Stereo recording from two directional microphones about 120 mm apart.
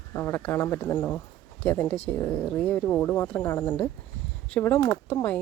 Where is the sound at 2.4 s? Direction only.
15° left (ahead or behind).